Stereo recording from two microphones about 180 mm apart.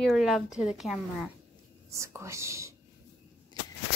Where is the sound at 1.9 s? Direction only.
15° right (ahead or behind).